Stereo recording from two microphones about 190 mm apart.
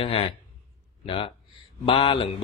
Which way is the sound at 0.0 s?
30° left (ahead or behind).